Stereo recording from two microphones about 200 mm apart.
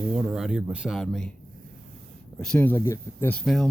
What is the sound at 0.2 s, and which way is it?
Speech, 5° right (ahead or behind).